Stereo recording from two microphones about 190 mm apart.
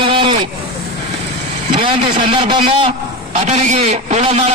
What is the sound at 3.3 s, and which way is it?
A man's voice, 35° right (ahead or behind).